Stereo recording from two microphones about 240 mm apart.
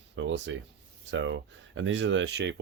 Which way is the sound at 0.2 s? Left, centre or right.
Right.